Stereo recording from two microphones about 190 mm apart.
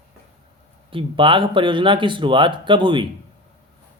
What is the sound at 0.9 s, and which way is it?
Speech, 25° right (ahead or behind).